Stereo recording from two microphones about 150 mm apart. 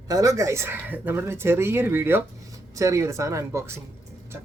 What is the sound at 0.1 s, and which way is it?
Speech, 20° right (ahead or behind).